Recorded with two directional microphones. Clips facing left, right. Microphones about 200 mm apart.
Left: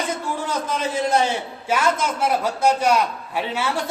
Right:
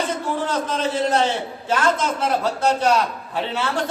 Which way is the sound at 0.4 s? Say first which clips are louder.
Right 1 dB; 10° left (ahead or behind).